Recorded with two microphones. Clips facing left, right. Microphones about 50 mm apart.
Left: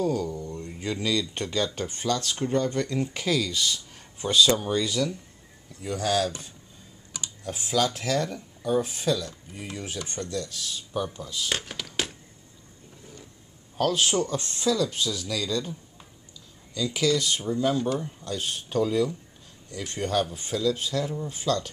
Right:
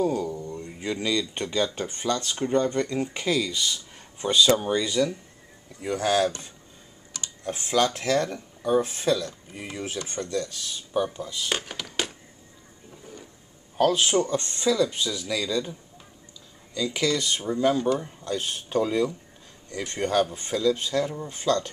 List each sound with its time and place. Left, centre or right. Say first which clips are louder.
0.0 s speech: right 1 dB; centre
4.5 s speech: right 2 dB; centre
5.8 s speech: right 3 dB; right
7.4 s speech: right 3 dB; right
7.8 s speech: right 3 dB; centre
10.4 s speech: right 1 dB; centre
10.9 s speech: right 5 dB; centre
13.7 s speech: right 3 dB; centre
16.7 s speech: left 1 dB; centre
20.9 s speech: right 2 dB; centre
21.3 s speech: right 2 dB; centre